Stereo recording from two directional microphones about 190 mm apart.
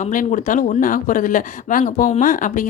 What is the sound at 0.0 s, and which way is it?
Speech, 40° left (ahead or behind).